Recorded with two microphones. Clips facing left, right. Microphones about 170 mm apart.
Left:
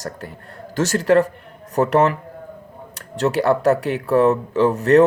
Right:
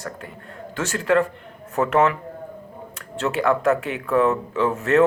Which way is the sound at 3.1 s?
40° left (ahead or behind).